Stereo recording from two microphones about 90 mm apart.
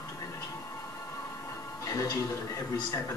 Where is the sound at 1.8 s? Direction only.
40° left (ahead or behind).